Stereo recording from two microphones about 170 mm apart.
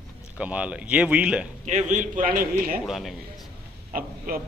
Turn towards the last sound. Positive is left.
turn(degrees=-55)  # may be behind; listen again after turning